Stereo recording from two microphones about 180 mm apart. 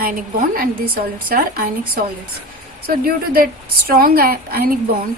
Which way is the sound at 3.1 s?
55° right (ahead or behind).